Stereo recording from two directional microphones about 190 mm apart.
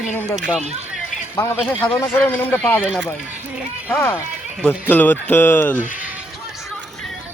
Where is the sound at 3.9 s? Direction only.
10° left (ahead or behind).